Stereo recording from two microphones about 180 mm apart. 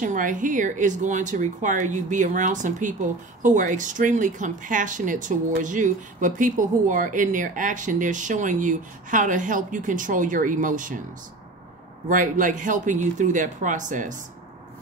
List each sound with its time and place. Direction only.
0.0 s speech: 45° right (ahead or behind)
12.1 s speech: 45° right (ahead or behind)